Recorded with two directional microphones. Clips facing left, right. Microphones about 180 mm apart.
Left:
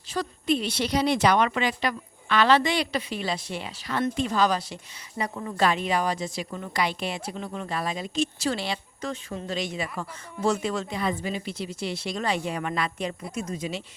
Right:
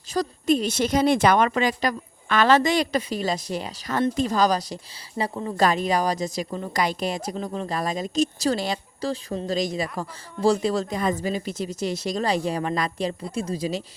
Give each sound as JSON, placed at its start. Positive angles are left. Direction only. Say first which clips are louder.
{"t": 0.1, "sound": "a woman's voice", "louder": "right 4 dB", "side_deg": -40}